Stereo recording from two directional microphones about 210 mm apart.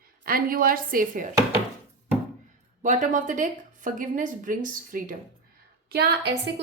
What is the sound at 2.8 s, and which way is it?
Speech, 35° right (ahead or behind).